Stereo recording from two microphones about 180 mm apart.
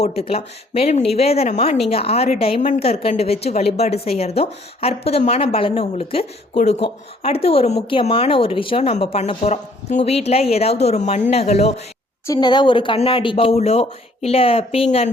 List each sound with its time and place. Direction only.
0.0 s a woman's voice: 35° left (ahead or behind)
12.2 s a woman's voice: 20° left (ahead or behind); by 15.1 s 35° left (ahead or behind)